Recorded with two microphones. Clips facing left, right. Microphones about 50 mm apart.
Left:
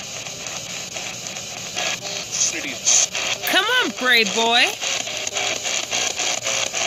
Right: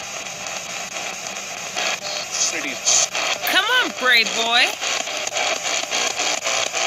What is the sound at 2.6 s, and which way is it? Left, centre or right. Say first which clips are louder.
Speech: right 2 dB; centre.